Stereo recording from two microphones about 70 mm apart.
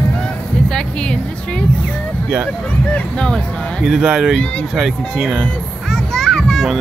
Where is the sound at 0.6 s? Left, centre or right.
Centre.